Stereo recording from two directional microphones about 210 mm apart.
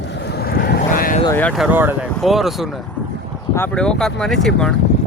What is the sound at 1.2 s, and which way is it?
Speech, 10° left (ahead or behind).